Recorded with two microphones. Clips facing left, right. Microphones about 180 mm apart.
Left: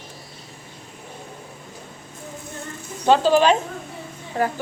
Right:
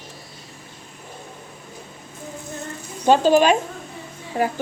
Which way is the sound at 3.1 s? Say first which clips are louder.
Right 1 dB; 15° right (ahead or behind).